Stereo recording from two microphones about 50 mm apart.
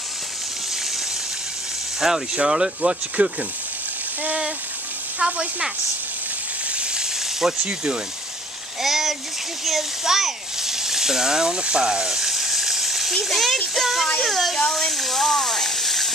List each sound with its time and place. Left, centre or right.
2.0 s speech: centre
5.2 s speech: centre
7.6 s speech: right
8.8 s a child's voice: centre
9.7 s a sound: centre
13.2 s a child's voice: centre